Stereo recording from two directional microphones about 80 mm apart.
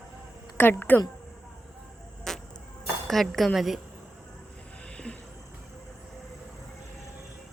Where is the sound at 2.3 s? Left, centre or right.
Centre.